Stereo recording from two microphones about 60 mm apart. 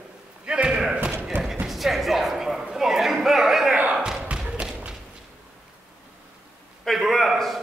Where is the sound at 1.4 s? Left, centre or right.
Centre.